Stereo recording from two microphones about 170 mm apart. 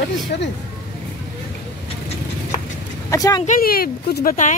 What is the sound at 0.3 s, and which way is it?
Speech, 70° left (ahead or behind).